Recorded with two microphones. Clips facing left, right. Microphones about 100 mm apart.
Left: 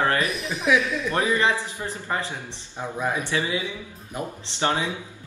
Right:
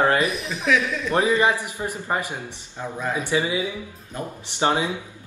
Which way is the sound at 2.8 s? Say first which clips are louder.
Left 1 dB; 15° left (ahead or behind).